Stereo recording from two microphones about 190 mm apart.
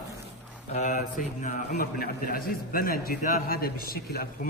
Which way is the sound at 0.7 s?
35° left (ahead or behind).